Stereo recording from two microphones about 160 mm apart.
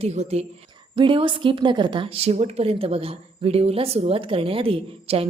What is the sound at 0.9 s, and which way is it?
A woman's voice, 30° right (ahead or behind).